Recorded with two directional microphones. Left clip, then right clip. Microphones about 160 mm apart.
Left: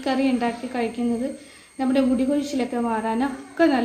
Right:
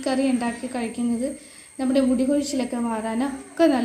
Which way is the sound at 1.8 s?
35° right (ahead or behind).